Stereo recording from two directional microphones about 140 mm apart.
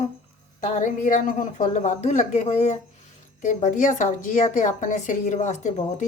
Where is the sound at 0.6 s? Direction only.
65° left (ahead or behind).